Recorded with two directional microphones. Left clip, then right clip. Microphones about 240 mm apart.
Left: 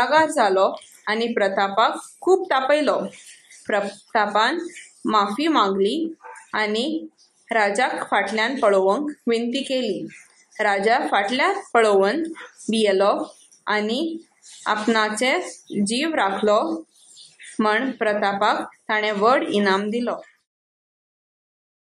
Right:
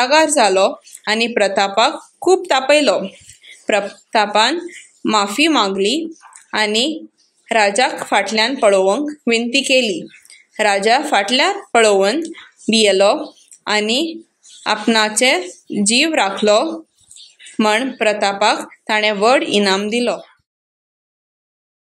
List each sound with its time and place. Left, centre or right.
0.0 s a woman's voice: right